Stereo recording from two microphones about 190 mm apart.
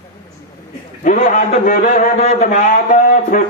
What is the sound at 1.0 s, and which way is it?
A man's voice, 40° left (ahead or behind).